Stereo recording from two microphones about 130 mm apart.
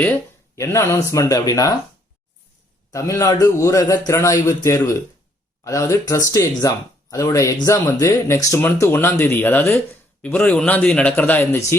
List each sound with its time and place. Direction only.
0.0 s a man's voice: 15° left (ahead or behind)
2.9 s a man's voice: 25° left (ahead or behind)